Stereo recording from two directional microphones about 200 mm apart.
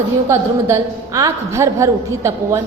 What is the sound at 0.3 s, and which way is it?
A woman's voice, 15° right (ahead or behind).